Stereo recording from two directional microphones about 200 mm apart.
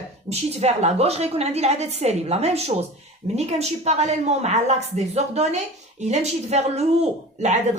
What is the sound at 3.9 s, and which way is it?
Speech, 35° right (ahead or behind).